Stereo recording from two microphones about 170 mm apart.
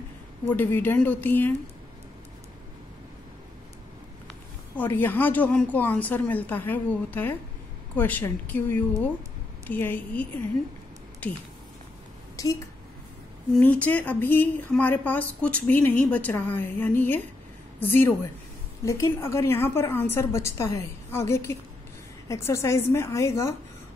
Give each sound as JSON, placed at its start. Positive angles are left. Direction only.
{"t": 0.5, "sound": "a woman's voice", "side_deg": 10}
{"t": 4.7, "sound": "a woman's voice", "side_deg": 10}
{"t": 12.4, "sound": "speech", "side_deg": 20}
{"t": 13.6, "sound": "a woman's voice", "side_deg": 10}